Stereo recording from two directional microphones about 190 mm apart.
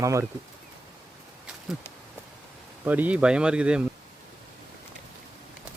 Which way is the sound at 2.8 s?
10° right (ahead or behind).